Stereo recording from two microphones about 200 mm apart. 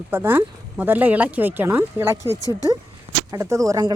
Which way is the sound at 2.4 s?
15° left (ahead or behind).